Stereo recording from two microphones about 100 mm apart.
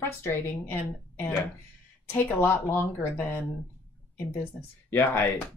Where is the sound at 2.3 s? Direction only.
20° left (ahead or behind).